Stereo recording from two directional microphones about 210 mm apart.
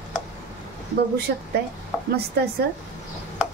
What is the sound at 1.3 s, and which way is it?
Speech, 50° right (ahead or behind).